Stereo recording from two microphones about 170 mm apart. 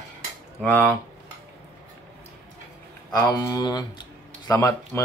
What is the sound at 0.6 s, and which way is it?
Speech, 10° left (ahead or behind).